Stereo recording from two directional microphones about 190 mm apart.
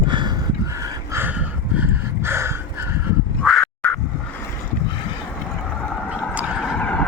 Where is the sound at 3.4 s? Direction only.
5° left (ahead or behind).